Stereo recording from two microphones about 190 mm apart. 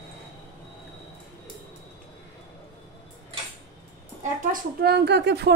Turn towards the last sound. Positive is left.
turn(degrees=-60)  # may be behind; listen again after turning